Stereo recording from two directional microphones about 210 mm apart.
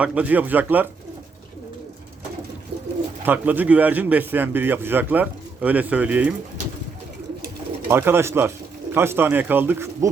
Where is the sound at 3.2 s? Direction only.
10° right (ahead or behind).